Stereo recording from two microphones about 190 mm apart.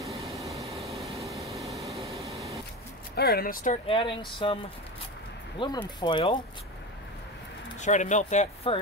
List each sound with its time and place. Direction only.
0.0 s vehicle: centre (ahead or behind)
3.2 s speech: 55° left (ahead or behind)
3.8 s speech: 25° left (ahead or behind)
5.6 s speech: 25° left (ahead or behind)
7.8 s speech: 40° left (ahead or behind)